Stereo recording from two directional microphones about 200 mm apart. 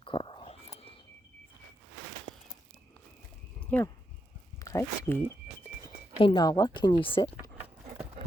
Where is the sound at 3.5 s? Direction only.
5° left (ahead or behind).